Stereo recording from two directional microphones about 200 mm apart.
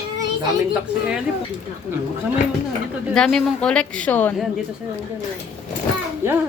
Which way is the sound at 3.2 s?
Centre (ahead or behind).